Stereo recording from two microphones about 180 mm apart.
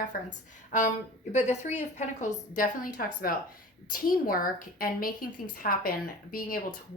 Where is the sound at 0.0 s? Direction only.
45° left (ahead or behind).